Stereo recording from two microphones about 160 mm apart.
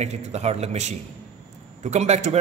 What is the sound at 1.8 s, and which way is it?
Speech, 45° right (ahead or behind).